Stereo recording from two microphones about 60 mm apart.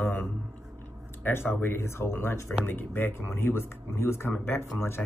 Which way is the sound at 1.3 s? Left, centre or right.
Left.